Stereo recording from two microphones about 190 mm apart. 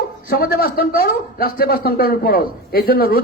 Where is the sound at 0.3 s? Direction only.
55° left (ahead or behind).